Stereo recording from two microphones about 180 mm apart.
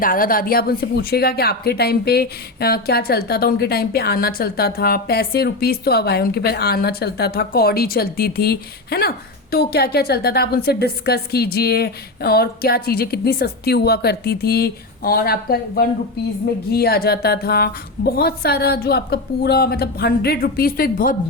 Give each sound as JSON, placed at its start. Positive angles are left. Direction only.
{"t": 0.0, "sound": "speech", "side_deg": 50}